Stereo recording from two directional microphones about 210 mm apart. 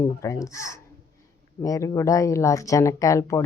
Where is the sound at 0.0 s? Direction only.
15° left (ahead or behind).